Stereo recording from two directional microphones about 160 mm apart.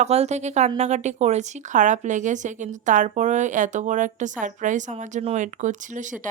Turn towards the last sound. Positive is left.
turn(degrees=-50)  # may be behind; listen again after turning